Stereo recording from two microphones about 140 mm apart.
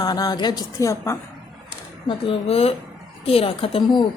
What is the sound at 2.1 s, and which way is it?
A woman's voice, 45° left (ahead or behind).